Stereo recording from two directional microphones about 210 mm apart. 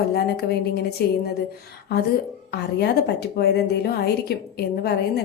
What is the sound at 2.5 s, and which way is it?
A woman's voice, 50° left (ahead or behind).